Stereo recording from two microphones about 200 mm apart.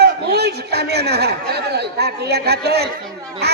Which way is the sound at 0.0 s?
55° right (ahead or behind).